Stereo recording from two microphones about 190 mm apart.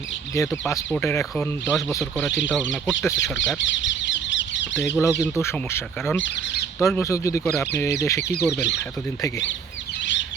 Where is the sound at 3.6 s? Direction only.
75° left (ahead or behind).